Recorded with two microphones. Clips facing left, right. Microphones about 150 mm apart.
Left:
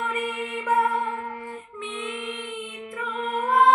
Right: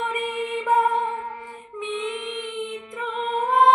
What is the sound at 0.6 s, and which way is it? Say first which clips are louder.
Music: right 2 dB; 15° right (ahead or behind).